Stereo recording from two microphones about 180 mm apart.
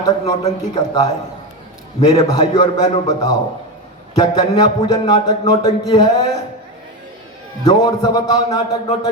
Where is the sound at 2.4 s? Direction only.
25° left (ahead or behind).